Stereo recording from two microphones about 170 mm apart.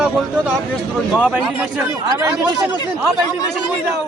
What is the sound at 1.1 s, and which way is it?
Speech, 5° right (ahead or behind).